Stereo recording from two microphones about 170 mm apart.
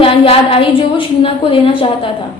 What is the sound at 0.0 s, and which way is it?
A woman's voice, 35° left (ahead or behind).